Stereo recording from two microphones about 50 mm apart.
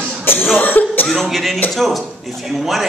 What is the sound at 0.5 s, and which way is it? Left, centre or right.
Speech, left.